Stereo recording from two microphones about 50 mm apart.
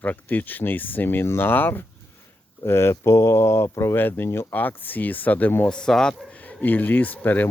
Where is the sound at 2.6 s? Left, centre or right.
Left.